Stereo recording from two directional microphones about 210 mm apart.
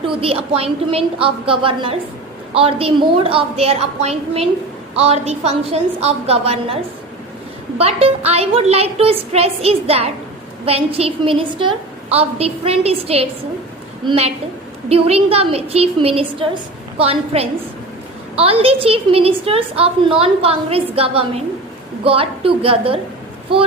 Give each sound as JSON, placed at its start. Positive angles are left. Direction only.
{"t": 0.1, "sound": "a woman's voice", "side_deg": -25}
{"t": 7.8, "sound": "a woman's voice", "side_deg": -30}